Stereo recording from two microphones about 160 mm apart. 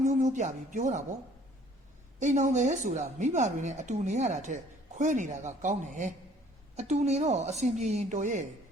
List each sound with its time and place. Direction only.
0.0 s speech: 50° right (ahead or behind)
2.1 s a woman's voice: 50° right (ahead or behind)